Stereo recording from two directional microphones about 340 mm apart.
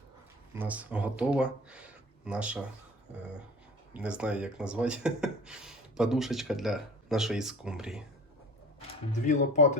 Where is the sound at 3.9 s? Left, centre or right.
Centre.